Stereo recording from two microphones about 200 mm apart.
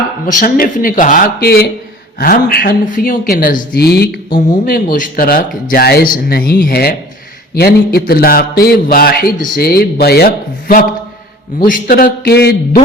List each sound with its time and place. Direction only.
0.3 s a man's voice: 40° left (ahead or behind)